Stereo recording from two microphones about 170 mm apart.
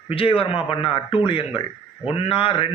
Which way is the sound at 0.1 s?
35° left (ahead or behind).